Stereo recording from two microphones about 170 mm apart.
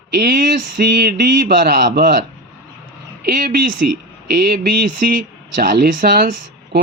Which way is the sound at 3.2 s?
55° right (ahead or behind).